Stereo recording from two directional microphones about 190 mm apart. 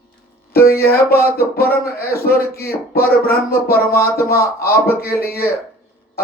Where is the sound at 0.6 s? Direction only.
55° left (ahead or behind).